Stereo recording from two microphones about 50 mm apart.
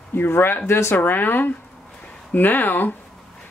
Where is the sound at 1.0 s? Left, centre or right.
Left.